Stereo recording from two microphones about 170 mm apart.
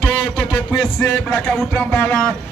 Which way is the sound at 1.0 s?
20° left (ahead or behind).